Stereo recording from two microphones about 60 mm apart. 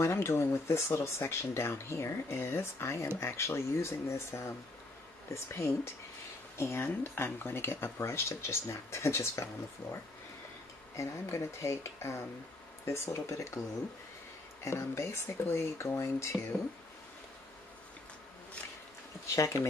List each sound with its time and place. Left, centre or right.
0.0 s speech: left
6.6 s speech: left
11.0 s speech: left
14.6 s speech: left
19.3 s speech: left